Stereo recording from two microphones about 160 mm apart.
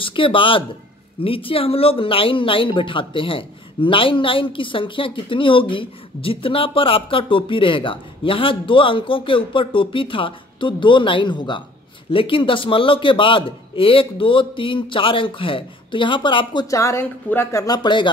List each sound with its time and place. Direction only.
0.0 s speech: 30° left (ahead or behind)
16.7 s speech: 15° left (ahead or behind)